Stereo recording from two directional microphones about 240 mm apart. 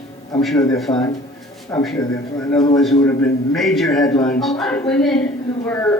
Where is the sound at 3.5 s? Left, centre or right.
Centre.